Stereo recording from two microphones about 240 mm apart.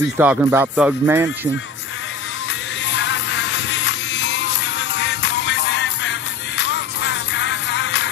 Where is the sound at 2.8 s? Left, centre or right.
Left.